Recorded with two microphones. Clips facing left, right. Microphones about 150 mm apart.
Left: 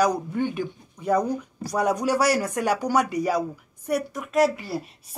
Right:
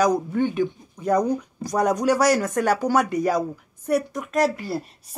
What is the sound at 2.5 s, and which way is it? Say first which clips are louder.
Speech: right 3 dB; 45° right (ahead or behind).